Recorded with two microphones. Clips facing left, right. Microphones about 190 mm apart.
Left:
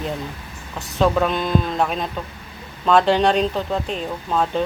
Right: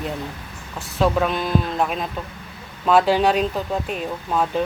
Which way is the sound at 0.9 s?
5° right (ahead or behind).